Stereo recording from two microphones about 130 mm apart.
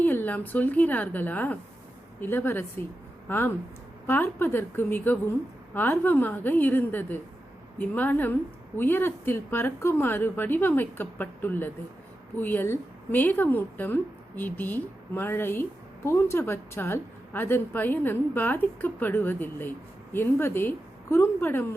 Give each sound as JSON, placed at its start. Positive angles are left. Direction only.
{"t": 0.0, "sound": "a woman's voice", "side_deg": 15}